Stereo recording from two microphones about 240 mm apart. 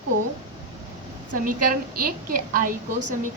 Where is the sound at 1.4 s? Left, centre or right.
Right.